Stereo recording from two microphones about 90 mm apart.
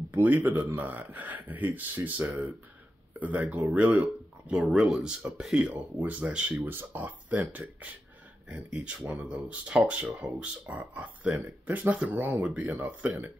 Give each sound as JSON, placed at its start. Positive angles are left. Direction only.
{"t": 0.1, "sound": "speech", "side_deg": -20}